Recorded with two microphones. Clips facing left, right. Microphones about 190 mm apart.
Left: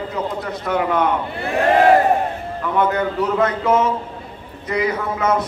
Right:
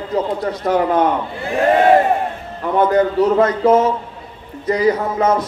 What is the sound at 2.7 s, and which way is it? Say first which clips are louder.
A man's voice: right 5 dB; 35° right (ahead or behind).